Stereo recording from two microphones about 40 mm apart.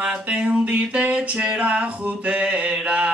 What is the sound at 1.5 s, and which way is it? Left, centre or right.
Music, right.